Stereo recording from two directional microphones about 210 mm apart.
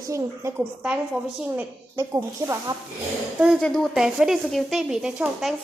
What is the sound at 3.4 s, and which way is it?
Speech, centre (ahead or behind).